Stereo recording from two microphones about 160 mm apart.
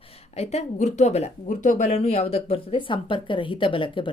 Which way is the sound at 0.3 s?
45° left (ahead or behind).